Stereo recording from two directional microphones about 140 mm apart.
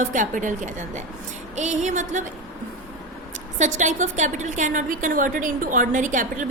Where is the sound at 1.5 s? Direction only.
55° right (ahead or behind).